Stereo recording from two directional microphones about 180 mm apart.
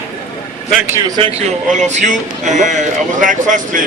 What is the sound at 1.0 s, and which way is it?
Speech, 25° right (ahead or behind).